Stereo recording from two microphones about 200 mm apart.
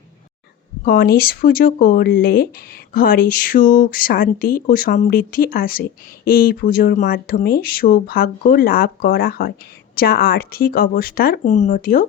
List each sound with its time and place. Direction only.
0.9 s speech: 45° left (ahead or behind)